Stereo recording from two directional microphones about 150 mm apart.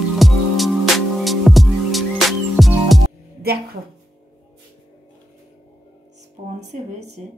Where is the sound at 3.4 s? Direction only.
90° right.